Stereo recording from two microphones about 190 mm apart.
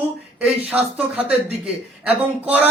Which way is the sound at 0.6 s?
5° right (ahead or behind).